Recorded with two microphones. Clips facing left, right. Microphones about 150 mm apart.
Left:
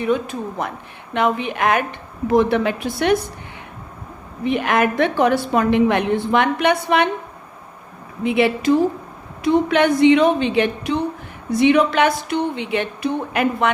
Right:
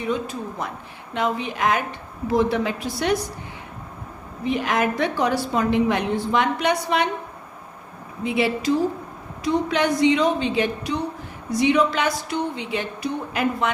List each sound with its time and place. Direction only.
0.0 s a woman's voice: 60° left (ahead or behind)
4.4 s a woman's voice: 60° left (ahead or behind)
8.2 s a woman's voice: 60° left (ahead or behind)